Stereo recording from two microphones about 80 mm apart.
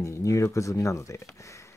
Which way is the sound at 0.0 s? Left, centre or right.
Left.